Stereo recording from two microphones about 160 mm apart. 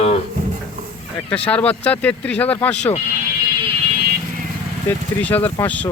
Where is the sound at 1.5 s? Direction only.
10° left (ahead or behind).